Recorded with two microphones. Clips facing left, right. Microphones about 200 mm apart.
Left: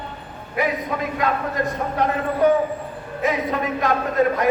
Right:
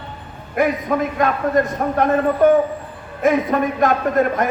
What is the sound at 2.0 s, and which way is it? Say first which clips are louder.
A man's voice: right 4 dB; 50° right (ahead or behind).